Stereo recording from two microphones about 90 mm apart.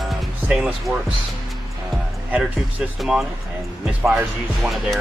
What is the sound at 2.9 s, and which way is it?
Speech, 5° right (ahead or behind).